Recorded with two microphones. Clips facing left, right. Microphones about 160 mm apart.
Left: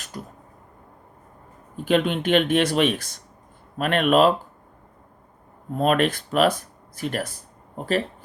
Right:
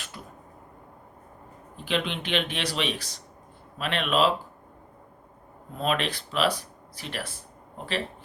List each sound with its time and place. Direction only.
0.1 s speech: 45° left (ahead or behind)
1.7 s speech: 45° left (ahead or behind)
5.7 s speech: 50° left (ahead or behind)